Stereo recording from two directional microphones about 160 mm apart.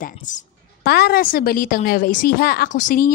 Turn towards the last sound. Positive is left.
turn(degrees=55)  # may be behind; listen again after turning